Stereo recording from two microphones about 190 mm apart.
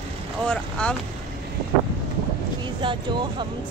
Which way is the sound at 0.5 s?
5° left (ahead or behind).